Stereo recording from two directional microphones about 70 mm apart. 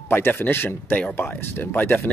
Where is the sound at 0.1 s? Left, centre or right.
Left.